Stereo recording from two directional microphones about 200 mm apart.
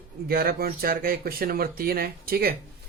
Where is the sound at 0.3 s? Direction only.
50° right (ahead or behind).